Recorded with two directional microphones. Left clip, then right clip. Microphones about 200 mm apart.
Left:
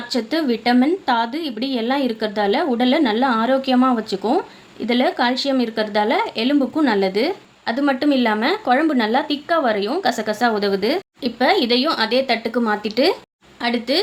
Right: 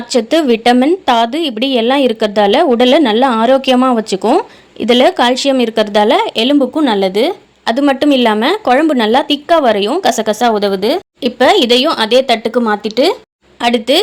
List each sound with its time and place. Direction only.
0.1 s a woman's voice: 40° right (ahead or behind); by 11.0 s 20° right (ahead or behind)
11.2 s a woman's voice: 40° right (ahead or behind); by 13.1 s 25° right (ahead or behind)
13.6 s a woman's voice: 40° right (ahead or behind)